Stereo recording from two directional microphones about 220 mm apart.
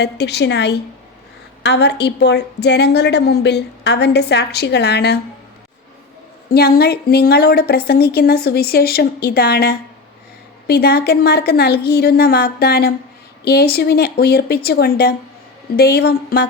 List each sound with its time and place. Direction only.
0.0 s a woman's voice: 50° left (ahead or behind)
6.5 s a woman's voice: 45° left (ahead or behind)